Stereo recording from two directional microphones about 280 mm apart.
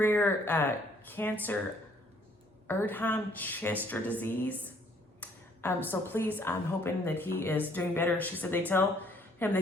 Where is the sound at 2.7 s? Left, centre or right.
Centre.